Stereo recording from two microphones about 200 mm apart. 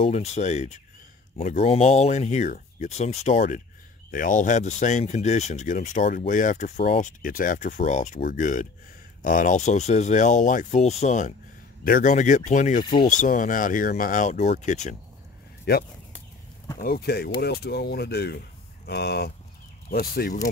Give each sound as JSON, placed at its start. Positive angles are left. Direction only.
{"t": 0.0, "sound": "speech", "side_deg": 35}
{"t": 15.7, "sound": "speech", "side_deg": 55}